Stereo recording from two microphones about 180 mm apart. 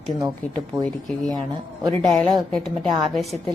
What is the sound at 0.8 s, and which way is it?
A woman's voice, 5° left (ahead or behind).